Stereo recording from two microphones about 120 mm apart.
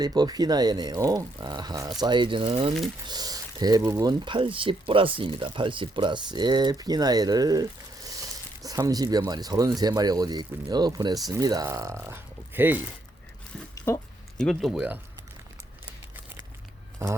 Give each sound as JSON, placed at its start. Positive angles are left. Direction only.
{"t": 0.0, "sound": "speech", "side_deg": -35}
{"t": 3.1, "sound": "speech", "side_deg": -35}
{"t": 4.2, "sound": "speech", "side_deg": -45}
{"t": 13.7, "sound": "pig", "side_deg": 25}
{"t": 14.3, "sound": "speech", "side_deg": 0}